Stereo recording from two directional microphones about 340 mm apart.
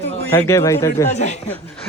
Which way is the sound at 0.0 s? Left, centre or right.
Centre.